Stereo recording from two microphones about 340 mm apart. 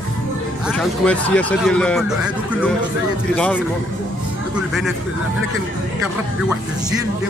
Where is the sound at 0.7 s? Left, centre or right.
Centre.